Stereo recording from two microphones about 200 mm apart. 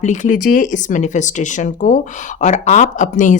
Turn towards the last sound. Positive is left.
turn(degrees=40)  # may be behind; listen again after turning